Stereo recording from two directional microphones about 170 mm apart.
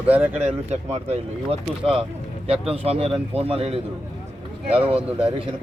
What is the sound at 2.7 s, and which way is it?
Speech, 35° right (ahead or behind).